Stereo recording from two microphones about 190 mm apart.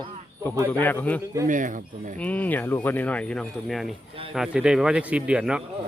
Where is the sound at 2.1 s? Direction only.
10° left (ahead or behind).